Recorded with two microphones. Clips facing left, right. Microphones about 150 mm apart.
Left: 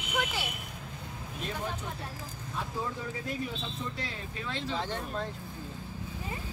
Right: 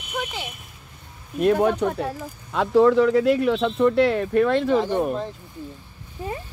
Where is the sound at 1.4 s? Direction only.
65° right (ahead or behind).